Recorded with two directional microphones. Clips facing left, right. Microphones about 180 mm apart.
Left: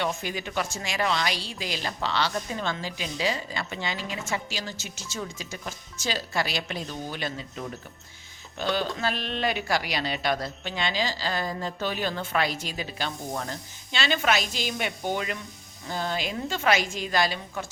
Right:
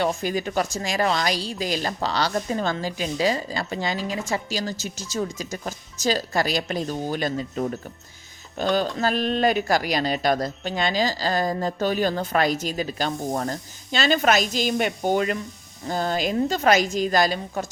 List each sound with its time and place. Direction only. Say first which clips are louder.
0.0 s a woman's voice: right 6 dB; 40° right (ahead or behind)